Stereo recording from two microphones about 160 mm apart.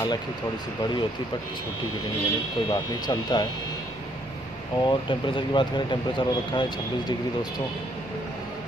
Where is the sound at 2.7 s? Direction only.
25° left (ahead or behind).